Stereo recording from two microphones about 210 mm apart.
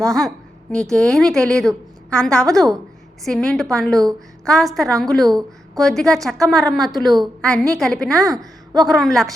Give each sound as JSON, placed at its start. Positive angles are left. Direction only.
{"t": 0.0, "sound": "a woman's voice", "side_deg": 5}
{"t": 5.2, "sound": "speech", "side_deg": -15}
{"t": 5.8, "sound": "a woman's voice", "side_deg": 5}